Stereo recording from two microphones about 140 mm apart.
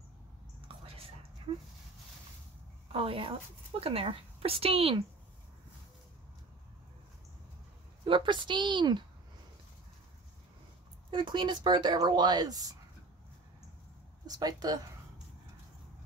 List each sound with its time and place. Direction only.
0.7 s whispering: 45° right (ahead or behind)
2.9 s a woman's voice: 40° right (ahead or behind)
8.0 s speech: 35° right (ahead or behind)
11.1 s speech: 35° right (ahead or behind)
14.2 s speech: 25° right (ahead or behind)